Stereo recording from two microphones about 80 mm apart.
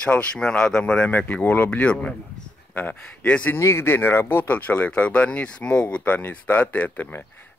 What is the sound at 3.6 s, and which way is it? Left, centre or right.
Speech, left.